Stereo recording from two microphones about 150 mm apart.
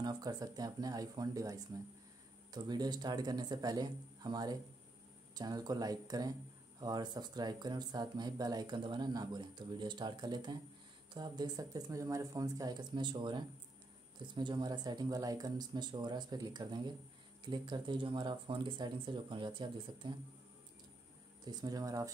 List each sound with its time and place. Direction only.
0.0 s speech: 25° right (ahead or behind)
21.5 s speech: 25° right (ahead or behind)